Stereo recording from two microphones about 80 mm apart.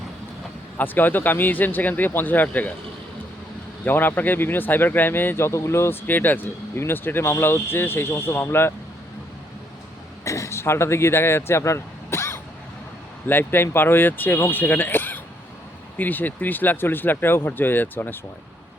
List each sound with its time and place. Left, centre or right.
0.8 s speech: left
3.8 s speech: left
10.2 s speech: left